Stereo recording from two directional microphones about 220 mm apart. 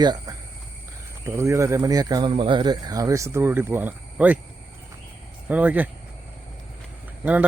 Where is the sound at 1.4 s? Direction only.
15° right (ahead or behind).